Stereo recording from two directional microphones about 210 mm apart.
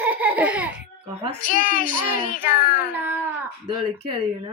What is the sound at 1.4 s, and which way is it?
A child's voice, 40° left (ahead or behind).